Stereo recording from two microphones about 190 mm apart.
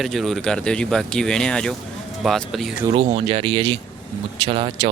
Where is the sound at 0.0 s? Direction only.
Centre (ahead or behind).